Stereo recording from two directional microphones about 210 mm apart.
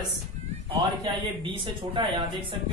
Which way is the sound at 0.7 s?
20° right (ahead or behind).